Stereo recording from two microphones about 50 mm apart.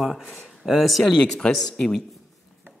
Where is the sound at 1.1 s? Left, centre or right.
Centre.